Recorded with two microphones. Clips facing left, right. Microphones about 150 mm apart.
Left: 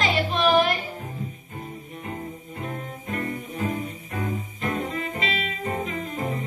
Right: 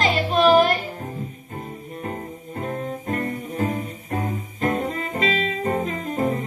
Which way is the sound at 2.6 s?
45° right (ahead or behind).